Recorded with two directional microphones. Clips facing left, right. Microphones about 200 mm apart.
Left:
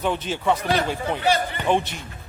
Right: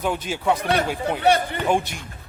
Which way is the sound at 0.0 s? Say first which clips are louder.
Even; 10° right (ahead or behind).